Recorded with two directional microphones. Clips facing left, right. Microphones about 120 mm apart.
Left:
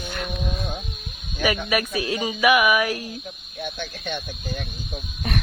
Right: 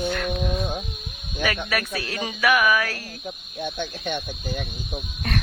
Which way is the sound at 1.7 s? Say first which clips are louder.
Left 4 dB; 15° left (ahead or behind).